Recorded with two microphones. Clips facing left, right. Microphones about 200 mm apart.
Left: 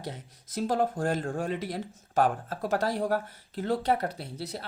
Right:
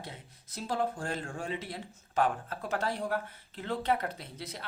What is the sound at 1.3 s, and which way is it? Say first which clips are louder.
Speech: left 6 dB; 55° left (ahead or behind).